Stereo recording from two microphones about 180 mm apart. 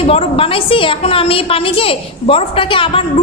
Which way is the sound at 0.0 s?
35° left (ahead or behind).